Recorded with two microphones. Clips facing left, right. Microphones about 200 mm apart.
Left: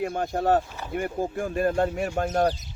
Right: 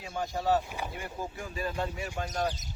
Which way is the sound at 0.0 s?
55° left (ahead or behind).